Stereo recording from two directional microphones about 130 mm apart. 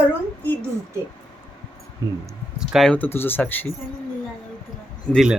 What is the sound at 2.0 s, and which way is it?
Child singing, 30° right (ahead or behind).